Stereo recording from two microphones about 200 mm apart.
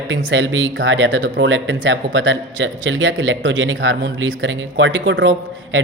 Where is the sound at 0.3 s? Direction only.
70° right (ahead or behind).